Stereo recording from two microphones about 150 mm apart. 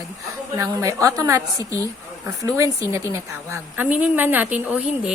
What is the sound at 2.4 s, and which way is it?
A woman's voice, 20° right (ahead or behind).